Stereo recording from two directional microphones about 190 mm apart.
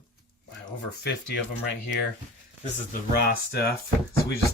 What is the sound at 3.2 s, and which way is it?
Speech, 55° left (ahead or behind).